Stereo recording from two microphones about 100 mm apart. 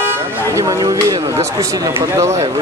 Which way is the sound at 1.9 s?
30° right (ahead or behind).